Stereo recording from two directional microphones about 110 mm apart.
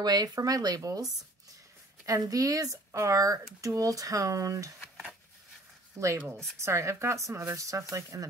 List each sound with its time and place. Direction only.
0.0 s speech: 40° right (ahead or behind)
2.0 s speech: 30° right (ahead or behind)
4.7 s dishes: 5° left (ahead or behind)
5.9 s speech: 25° right (ahead or behind)